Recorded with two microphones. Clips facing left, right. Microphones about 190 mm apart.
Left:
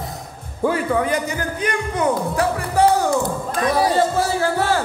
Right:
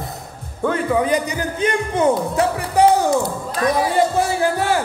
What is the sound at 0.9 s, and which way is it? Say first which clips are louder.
Speech: right 2 dB; 20° right (ahead or behind).